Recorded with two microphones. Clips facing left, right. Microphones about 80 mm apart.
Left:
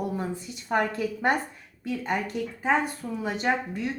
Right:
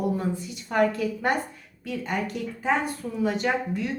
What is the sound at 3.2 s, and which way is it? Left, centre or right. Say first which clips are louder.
Speech: right 2 dB; left.